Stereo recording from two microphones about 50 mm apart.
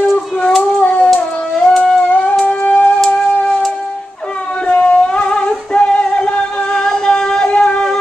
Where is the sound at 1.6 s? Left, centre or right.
Centre.